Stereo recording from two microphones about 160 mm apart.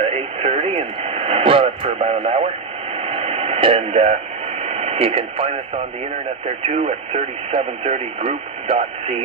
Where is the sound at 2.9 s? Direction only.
40° right (ahead or behind).